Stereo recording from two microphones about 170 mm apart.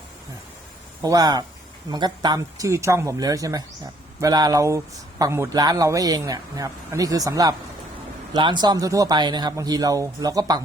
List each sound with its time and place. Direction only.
1.0 s speech: 20° right (ahead or behind)